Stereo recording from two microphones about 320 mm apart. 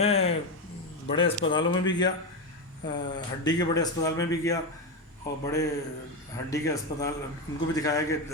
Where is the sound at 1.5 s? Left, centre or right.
Centre.